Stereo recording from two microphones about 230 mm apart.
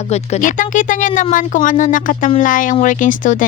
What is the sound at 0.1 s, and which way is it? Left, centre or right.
Speech, left.